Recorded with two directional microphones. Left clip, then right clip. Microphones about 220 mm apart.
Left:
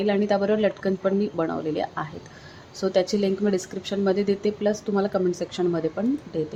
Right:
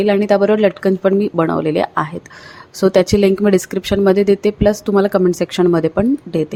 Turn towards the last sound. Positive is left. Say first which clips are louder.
# right 10 dB
turn(degrees=-35)  # may be behind; listen again after turning